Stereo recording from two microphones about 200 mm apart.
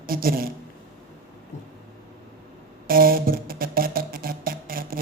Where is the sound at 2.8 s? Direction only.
45° right (ahead or behind).